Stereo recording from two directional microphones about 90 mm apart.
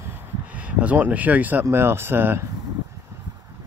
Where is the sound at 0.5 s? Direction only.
15° right (ahead or behind).